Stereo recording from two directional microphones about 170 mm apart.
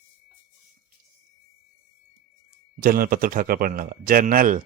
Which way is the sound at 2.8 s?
55° right (ahead or behind).